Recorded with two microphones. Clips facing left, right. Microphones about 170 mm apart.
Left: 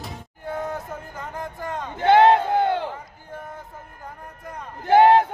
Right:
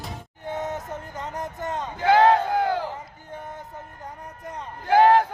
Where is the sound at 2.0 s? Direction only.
25° left (ahead or behind).